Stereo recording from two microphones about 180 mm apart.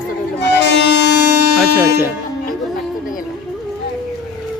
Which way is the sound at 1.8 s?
10° right (ahead or behind).